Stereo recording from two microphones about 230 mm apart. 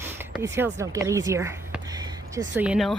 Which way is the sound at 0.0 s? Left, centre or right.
Centre.